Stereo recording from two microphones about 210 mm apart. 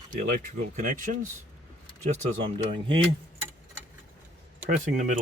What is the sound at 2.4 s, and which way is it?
Speech, 25° right (ahead or behind).